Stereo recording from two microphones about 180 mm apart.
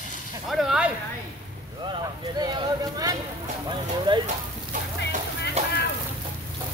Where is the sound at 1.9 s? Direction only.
25° right (ahead or behind).